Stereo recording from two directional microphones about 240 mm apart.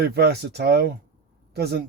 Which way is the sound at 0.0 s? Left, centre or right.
Right.